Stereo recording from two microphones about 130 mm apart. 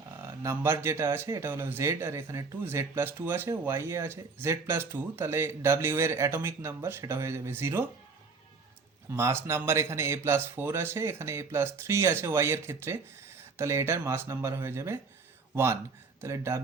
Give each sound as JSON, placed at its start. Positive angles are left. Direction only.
{"t": 0.4, "sound": "speech", "side_deg": -20}
{"t": 9.0, "sound": "speech", "side_deg": -20}